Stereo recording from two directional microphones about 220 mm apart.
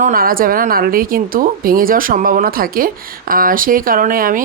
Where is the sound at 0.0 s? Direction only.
40° right (ahead or behind).